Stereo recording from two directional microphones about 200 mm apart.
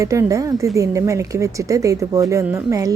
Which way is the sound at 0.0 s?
15° right (ahead or behind).